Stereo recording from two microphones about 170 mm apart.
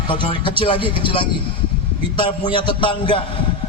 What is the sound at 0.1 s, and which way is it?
A man's voice, 30° left (ahead or behind).